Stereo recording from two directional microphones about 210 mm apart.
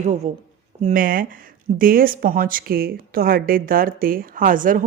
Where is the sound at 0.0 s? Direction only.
30° right (ahead or behind).